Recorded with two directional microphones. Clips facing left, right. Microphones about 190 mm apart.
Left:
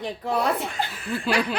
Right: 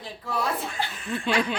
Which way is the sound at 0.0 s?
65° left (ahead or behind).